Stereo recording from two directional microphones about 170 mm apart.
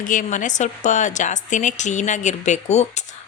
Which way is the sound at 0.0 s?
50° left (ahead or behind).